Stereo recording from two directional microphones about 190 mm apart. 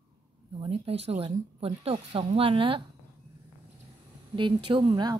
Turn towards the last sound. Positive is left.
turn(degrees=-25)  # may be behind; listen again after turning